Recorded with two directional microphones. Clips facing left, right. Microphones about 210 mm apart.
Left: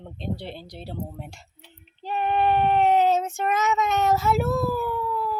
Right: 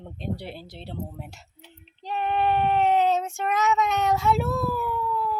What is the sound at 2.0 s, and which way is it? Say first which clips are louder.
Child singing: left 2 dB; 5° left (ahead or behind).